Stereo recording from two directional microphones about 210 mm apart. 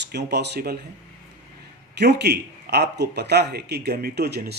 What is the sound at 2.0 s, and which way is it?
Speech, 55° right (ahead or behind).